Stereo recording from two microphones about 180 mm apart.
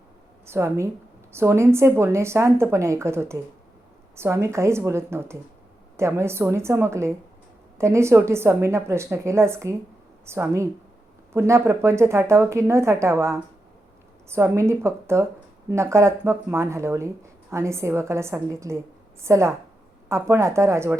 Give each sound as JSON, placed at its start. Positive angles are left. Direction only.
{"t": 0.4, "sound": "speech", "side_deg": -15}